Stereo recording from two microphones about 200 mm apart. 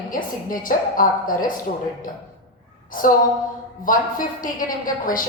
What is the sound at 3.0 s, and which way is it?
A woman's voice, 45° left (ahead or behind).